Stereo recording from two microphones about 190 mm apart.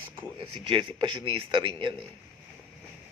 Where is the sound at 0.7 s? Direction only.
25° right (ahead or behind).